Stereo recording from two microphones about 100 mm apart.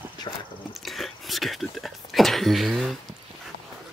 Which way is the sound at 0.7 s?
Centre (ahead or behind).